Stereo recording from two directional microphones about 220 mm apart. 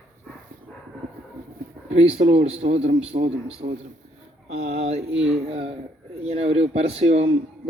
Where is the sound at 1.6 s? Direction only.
40° right (ahead or behind).